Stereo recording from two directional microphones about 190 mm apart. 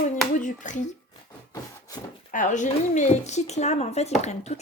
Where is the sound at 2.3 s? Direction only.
40° left (ahead or behind).